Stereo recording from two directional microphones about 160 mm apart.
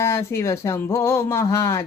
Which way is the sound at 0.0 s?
15° left (ahead or behind).